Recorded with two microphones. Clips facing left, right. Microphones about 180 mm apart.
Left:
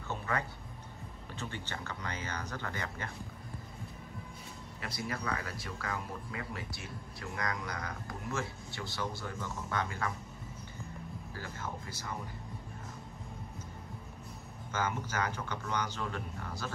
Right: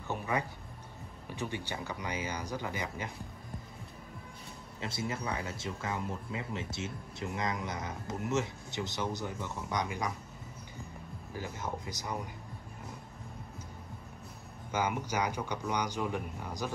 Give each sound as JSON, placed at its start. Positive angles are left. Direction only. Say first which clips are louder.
{"t": 0.1, "sound": "speech", "louder": "right 2 dB", "side_deg": -15}
{"t": 4.8, "sound": "speech", "louder": "right 2 dB", "side_deg": -25}
{"t": 11.3, "sound": "speech", "louder": "right 5 dB", "side_deg": -15}
{"t": 14.7, "sound": "speech", "louder": "right 3 dB", "side_deg": -15}